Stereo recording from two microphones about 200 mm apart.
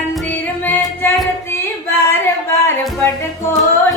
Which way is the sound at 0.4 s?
10° left (ahead or behind).